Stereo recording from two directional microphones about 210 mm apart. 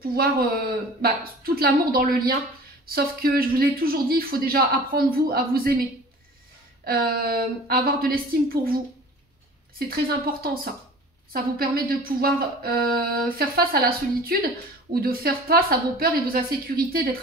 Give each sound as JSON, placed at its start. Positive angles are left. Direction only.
{"t": 0.0, "sound": "a woman's voice", "side_deg": -45}
{"t": 6.8, "sound": "a woman's voice", "side_deg": -45}
{"t": 9.8, "sound": "a woman's voice", "side_deg": -45}